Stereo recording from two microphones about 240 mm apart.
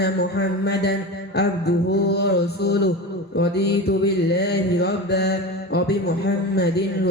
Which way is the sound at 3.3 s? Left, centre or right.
Left.